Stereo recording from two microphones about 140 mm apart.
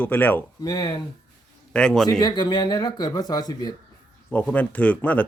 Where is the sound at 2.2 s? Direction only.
30° left (ahead or behind).